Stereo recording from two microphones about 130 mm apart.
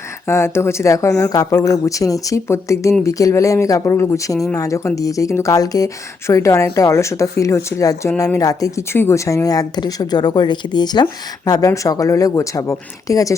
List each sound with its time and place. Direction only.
0.3 s speech: 20° left (ahead or behind)